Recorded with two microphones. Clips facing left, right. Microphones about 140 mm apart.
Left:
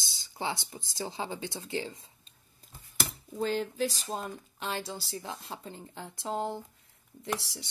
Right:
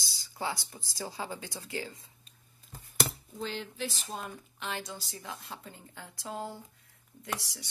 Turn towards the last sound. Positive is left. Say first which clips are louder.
# left 3 dB
turn(degrees=25)  # may be behind; listen again after turning